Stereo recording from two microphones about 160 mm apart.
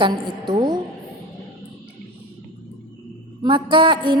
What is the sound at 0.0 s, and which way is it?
Speech, 30° right (ahead or behind).